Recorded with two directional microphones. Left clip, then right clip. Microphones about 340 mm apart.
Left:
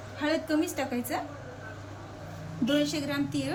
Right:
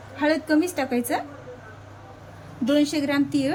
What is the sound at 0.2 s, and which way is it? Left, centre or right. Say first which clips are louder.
A woman's voice: right 7 dB; centre.